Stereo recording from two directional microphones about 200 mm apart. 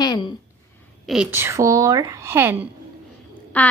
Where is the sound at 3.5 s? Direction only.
10° left (ahead or behind).